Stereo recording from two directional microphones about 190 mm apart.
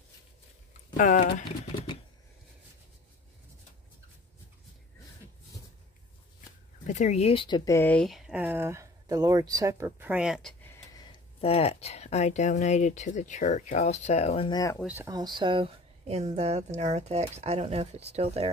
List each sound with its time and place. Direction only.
0.9 s speech: 45° left (ahead or behind)
6.9 s speech: 40° left (ahead or behind); by 10.5 s 5° right (ahead or behind)
11.1 s speech: 30° left (ahead or behind)
14.8 s speech: 5° right (ahead or behind)
15.0 s speech: 20° right (ahead or behind)